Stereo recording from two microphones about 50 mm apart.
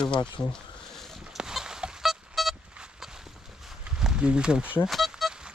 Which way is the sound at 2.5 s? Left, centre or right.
Centre.